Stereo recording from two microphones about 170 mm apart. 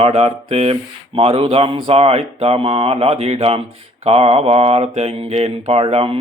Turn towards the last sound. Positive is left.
turn(degrees=-35)  # may be behind; listen again after turning